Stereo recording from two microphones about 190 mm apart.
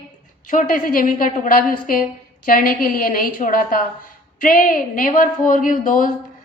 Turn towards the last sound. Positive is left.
turn(degrees=45)  # may be behind; listen again after turning